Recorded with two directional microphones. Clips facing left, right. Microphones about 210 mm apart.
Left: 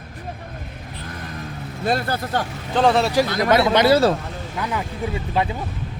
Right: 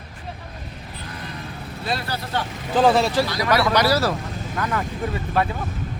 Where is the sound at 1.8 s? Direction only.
50° left (ahead or behind).